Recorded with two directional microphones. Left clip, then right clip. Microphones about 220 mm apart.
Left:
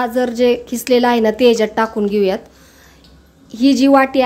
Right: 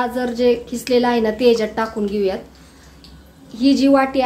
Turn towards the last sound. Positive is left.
turn(degrees=35)  # may be behind; listen again after turning